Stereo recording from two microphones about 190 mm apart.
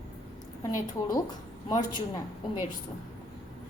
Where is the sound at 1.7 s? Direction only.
20° left (ahead or behind).